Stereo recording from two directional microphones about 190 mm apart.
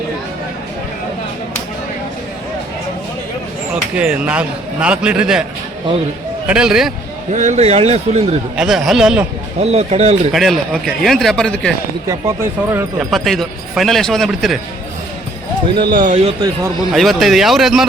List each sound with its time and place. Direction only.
3.9 s a man's voice: 5° right (ahead or behind)
6.5 s speech: 5° right (ahead or behind)
7.3 s speech: 40° right (ahead or behind)
8.5 s speech: centre (ahead or behind)
9.6 s speech: 35° right (ahead or behind)
10.3 s speech: centre (ahead or behind)
12.0 s a man's voice: 15° right (ahead or behind)
13.0 s speech: centre (ahead or behind)
16.0 s speech: 40° right (ahead or behind)
16.9 s speech: centre (ahead or behind)